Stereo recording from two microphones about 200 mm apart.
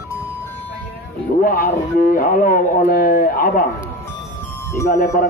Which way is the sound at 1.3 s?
45° left (ahead or behind).